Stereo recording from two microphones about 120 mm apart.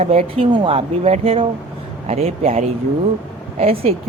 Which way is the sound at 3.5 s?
55° right (ahead or behind).